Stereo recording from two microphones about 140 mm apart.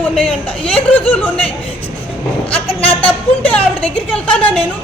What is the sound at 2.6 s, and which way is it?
A woman's voice, 40° left (ahead or behind).